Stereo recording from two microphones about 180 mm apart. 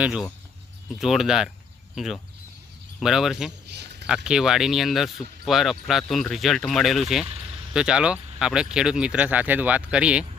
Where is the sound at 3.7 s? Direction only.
65° right (ahead or behind).